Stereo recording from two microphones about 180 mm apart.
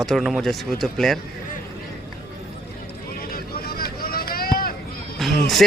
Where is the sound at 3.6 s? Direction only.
60° left (ahead or behind).